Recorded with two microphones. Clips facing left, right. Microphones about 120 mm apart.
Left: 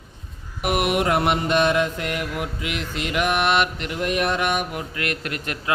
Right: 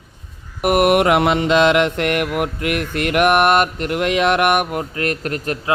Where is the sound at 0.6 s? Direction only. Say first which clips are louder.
Right 7 dB; 50° right (ahead or behind).